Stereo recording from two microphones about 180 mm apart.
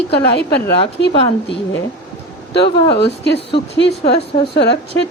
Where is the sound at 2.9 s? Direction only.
70° left (ahead or behind).